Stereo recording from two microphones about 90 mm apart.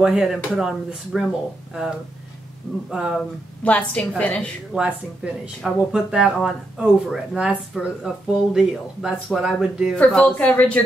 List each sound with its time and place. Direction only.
0.0 s speech: 5° right (ahead or behind)
3.6 s speech: 15° left (ahead or behind)
4.7 s speech: 10° right (ahead or behind)
5.6 s speech: centre (ahead or behind)
9.9 s speech: 15° left (ahead or behind)